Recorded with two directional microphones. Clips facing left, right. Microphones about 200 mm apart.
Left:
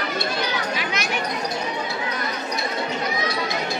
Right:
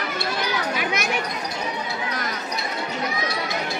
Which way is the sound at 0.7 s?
50° right (ahead or behind).